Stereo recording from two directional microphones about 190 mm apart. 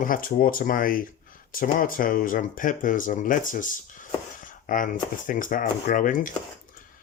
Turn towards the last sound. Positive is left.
turn(degrees=45)  # may be behind; listen again after turning